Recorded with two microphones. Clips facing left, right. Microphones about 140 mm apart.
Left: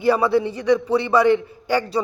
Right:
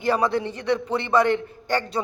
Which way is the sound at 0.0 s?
10° left (ahead or behind).